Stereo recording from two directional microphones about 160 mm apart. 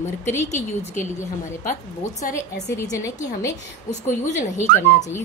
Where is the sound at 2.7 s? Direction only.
20° left (ahead or behind).